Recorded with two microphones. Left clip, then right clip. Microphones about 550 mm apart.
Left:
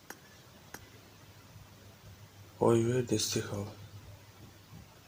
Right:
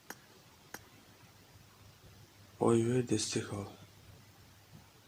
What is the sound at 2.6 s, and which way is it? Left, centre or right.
Speech, right.